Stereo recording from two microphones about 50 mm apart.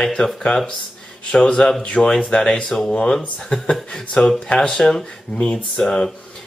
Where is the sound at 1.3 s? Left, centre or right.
Left.